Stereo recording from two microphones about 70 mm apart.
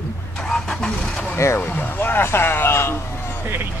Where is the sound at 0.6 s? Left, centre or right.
Centre.